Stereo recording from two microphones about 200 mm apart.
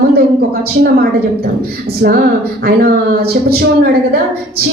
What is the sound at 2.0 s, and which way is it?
Speech, 55° right (ahead or behind).